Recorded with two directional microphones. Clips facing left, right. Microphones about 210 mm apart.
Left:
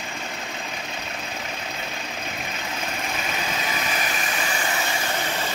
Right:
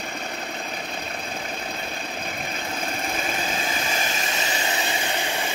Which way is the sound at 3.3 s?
30° right (ahead or behind).